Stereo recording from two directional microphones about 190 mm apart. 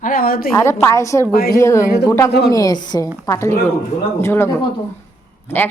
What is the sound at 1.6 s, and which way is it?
A woman's voice, 15° left (ahead or behind).